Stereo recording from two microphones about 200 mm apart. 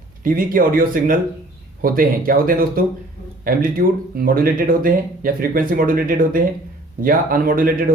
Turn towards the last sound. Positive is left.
turn(degrees=-45)  # may be behind; listen again after turning